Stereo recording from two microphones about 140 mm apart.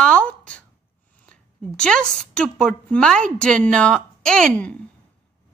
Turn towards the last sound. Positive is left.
turn(degrees=5)  # may be behind; listen again after turning